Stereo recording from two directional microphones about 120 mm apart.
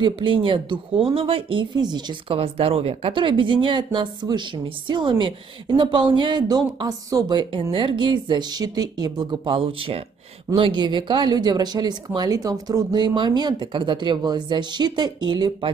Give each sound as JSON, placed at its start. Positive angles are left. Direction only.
{"t": 0.0, "sound": "speech", "side_deg": -45}
{"t": 2.3, "sound": "speech", "side_deg": -55}
{"t": 7.7, "sound": "speech", "side_deg": -45}